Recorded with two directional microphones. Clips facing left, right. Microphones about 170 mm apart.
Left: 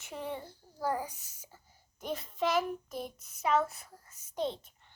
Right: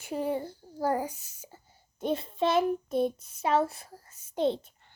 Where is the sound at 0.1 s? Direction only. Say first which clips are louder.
Right 9 dB; 30° right (ahead or behind).